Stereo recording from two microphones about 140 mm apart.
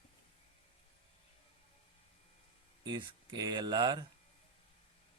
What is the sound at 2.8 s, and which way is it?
A man's voice, 35° right (ahead or behind).